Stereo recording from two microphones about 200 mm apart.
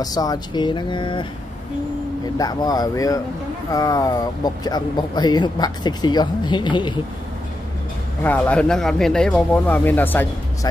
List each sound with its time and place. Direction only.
0.0 s speech: 20° left (ahead or behind)
2.3 s speech: 20° left (ahead or behind)
8.2 s speech: 5° left (ahead or behind)